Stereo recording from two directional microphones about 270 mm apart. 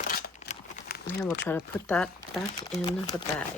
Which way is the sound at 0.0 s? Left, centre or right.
Left.